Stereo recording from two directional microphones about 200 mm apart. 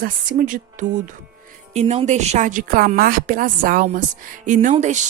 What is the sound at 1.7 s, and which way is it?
Speech, 30° right (ahead or behind).